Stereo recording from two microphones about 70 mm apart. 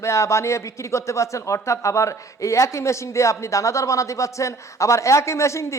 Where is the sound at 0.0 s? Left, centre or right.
Left.